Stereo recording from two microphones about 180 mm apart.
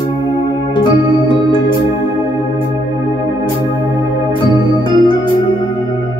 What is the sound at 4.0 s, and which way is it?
Organ, 25° left (ahead or behind).